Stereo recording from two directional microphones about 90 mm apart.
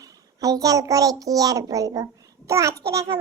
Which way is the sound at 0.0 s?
45° right (ahead or behind).